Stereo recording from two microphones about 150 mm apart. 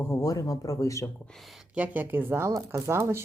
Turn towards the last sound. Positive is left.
turn(degrees=-15)  # may be behind; listen again after turning